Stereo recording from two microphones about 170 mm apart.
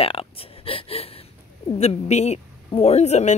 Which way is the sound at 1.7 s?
40° left (ahead or behind).